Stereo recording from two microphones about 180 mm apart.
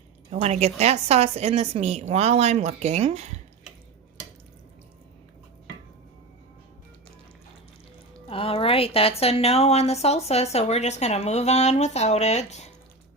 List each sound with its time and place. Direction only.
0.3 s a woman's voice: 35° right (ahead or behind)
8.3 s speech: 30° left (ahead or behind)